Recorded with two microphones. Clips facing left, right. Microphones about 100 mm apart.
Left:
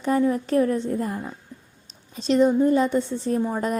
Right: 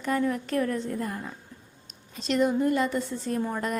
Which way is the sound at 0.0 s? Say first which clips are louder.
Left 5 dB; 30° left (ahead or behind).